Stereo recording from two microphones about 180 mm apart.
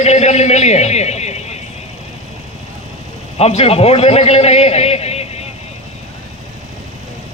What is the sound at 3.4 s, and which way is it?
A man's voice, 35° left (ahead or behind).